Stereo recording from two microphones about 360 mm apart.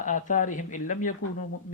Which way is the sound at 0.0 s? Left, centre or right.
Left.